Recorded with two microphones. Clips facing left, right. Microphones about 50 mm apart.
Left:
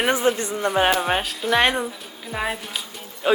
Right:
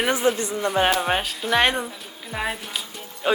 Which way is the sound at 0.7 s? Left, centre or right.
Centre.